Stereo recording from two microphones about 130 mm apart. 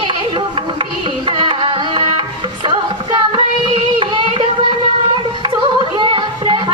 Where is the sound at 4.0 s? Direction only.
40° right (ahead or behind).